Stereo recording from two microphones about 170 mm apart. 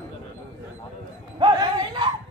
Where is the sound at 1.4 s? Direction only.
25° right (ahead or behind).